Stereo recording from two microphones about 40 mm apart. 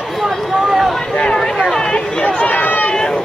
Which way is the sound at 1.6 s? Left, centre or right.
Centre.